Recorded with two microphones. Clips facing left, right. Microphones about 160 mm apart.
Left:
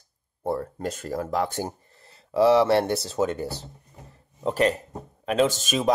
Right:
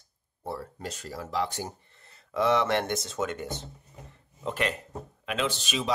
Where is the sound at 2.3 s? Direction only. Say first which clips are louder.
Left 7 dB; 35° left (ahead or behind).